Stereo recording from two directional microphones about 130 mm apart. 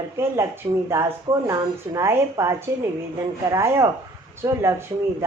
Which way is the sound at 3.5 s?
25° right (ahead or behind).